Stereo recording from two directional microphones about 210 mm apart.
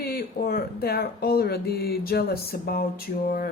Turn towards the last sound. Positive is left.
turn(degrees=45)  # may be behind; listen again after turning